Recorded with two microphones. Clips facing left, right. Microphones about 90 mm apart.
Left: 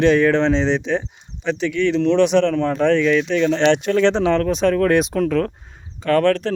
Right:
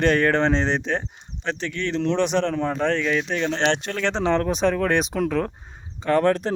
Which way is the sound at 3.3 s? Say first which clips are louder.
Left 6 dB; 25° right (ahead or behind).